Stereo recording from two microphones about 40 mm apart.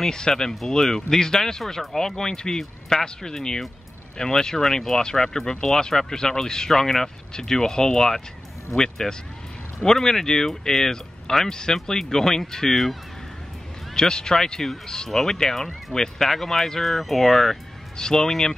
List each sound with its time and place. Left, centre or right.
0.0 s speech: centre
13.9 s speech: centre
17.9 s speech: centre